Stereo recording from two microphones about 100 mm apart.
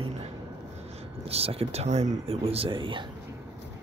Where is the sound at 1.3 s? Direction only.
80° right; by 3.0 s 55° right (ahead or behind).